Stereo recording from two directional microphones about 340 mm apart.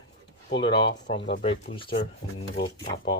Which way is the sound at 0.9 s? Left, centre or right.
Left.